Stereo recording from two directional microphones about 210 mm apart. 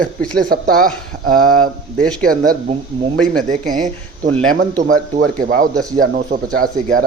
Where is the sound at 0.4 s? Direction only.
45° right (ahead or behind).